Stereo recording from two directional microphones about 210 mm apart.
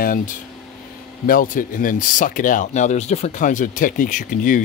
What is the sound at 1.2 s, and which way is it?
Speech, 40° left (ahead or behind).